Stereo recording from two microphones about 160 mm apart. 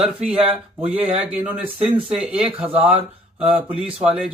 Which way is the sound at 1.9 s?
35° right (ahead or behind).